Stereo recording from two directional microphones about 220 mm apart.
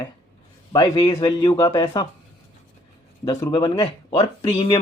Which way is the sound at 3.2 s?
20° left (ahead or behind).